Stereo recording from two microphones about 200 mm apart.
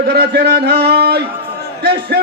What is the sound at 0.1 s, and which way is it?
A man's voice, 55° right (ahead or behind).